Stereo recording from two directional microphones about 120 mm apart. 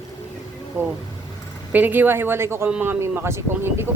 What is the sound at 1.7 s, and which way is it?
Speech, 15° right (ahead or behind).